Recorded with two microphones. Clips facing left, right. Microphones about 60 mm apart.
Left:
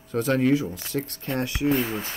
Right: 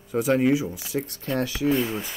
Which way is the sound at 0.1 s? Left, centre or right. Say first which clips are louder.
Right 1 dB; centre.